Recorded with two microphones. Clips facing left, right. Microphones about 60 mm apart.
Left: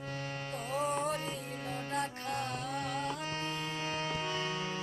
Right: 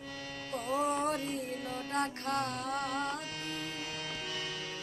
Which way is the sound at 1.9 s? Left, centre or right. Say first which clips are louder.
Right 4 dB; right.